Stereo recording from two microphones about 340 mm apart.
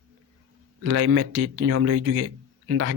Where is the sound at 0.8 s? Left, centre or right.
Right.